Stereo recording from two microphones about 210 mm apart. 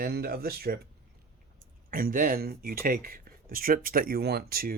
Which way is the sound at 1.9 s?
45° right (ahead or behind).